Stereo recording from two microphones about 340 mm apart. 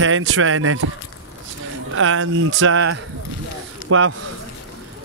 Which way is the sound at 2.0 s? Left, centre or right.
Right.